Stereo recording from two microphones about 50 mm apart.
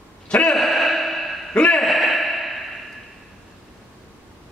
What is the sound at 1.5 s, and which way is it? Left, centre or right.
Speech, left.